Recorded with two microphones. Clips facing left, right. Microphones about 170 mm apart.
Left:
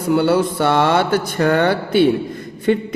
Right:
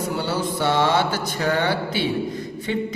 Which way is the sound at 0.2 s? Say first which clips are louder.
Left 8 dB; 60° left (ahead or behind).